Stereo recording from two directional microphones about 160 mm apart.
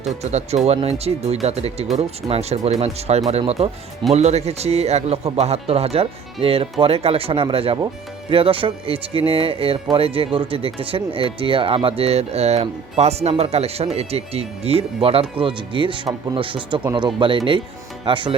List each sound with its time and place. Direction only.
0.2 s speech: 45° right (ahead or behind)